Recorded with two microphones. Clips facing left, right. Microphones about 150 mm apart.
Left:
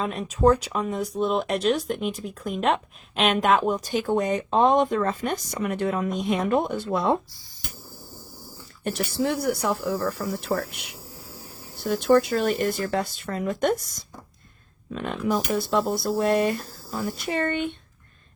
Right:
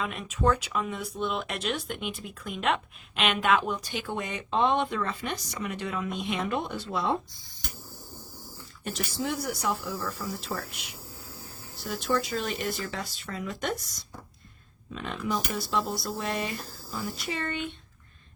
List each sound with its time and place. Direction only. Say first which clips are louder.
0.0 s speech: left 6 dB; 35° left (ahead or behind); by 7.2 s 50° left (ahead or behind)
8.8 s speech: left 7 dB; 60° left (ahead or behind)